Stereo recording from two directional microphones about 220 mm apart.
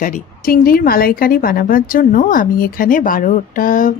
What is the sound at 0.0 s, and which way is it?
A woman's voice, 40° left (ahead or behind).